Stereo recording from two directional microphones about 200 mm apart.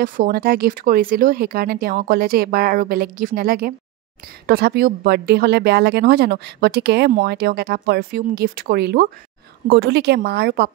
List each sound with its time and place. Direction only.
0.0 s a woman's voice: 45° right (ahead or behind)